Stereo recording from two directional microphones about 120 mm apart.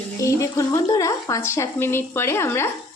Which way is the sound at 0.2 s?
25° left (ahead or behind).